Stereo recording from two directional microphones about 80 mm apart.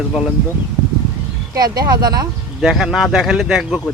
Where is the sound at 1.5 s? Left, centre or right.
Right.